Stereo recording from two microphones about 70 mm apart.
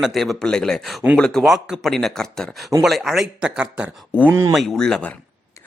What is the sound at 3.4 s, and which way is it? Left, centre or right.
Speech, centre.